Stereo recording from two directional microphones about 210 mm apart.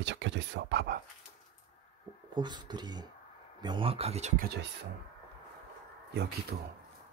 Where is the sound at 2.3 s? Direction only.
20° right (ahead or behind).